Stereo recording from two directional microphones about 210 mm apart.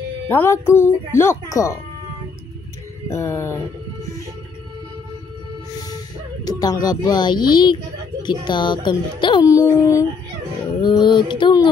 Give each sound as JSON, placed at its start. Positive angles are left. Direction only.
{"t": 0.3, "sound": "speech", "side_deg": 10}
{"t": 3.1, "sound": "speech", "side_deg": 15}
{"t": 6.4, "sound": "a woman's voice", "side_deg": 20}
{"t": 8.2, "sound": "music", "side_deg": 20}
{"t": 10.8, "sound": "a woman's voice", "side_deg": 20}